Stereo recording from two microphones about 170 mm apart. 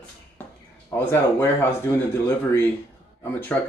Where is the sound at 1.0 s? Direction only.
15° left (ahead or behind).